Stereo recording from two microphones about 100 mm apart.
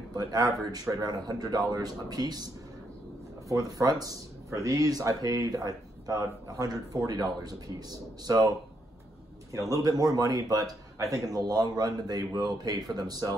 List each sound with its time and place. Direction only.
0.1 s a man's voice: 40° right (ahead or behind)